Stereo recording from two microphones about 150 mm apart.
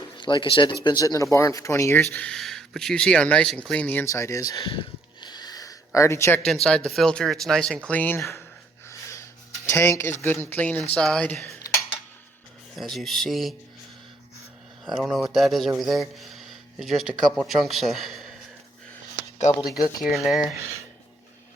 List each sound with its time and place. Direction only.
0.2 s speech: 30° left (ahead or behind)
2.0 s speech: 5° left (ahead or behind)
6.4 s speech: 5° left (ahead or behind)
8.9 s a sound: 20° left (ahead or behind)
10.9 s speech: 5° left (ahead or behind)
11.4 s cutlery: 20° left (ahead or behind)
12.7 s speech: centre (ahead or behind)
14.8 s speech: centre (ahead or behind)
20.0 s speech: centre (ahead or behind)